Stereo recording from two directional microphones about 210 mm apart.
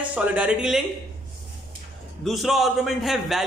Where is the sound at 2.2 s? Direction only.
Centre (ahead or behind).